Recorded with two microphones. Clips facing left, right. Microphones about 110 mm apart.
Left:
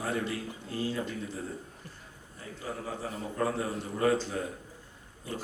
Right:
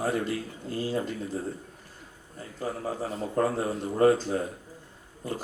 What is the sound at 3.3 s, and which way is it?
Speech, 40° right (ahead or behind).